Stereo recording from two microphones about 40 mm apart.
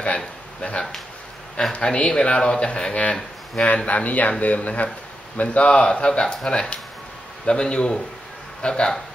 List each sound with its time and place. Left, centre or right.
0.6 s a man's voice: left